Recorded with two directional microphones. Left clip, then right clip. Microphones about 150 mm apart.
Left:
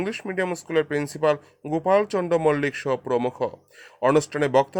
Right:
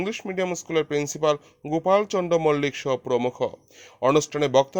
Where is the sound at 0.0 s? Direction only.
35° right (ahead or behind).